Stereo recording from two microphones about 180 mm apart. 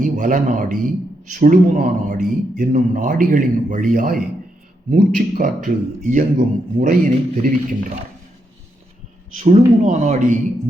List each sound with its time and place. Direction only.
0.0 s speech: 45° right (ahead or behind)
9.4 s speech: 40° right (ahead or behind)